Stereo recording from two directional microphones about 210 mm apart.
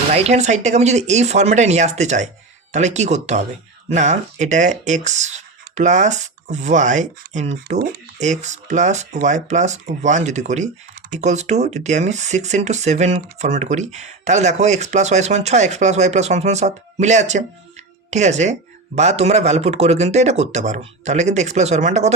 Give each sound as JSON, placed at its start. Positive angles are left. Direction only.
{"t": 0.1, "sound": "speech", "side_deg": -30}